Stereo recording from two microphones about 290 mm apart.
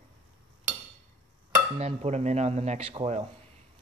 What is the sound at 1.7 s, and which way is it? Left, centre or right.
Dishes, right.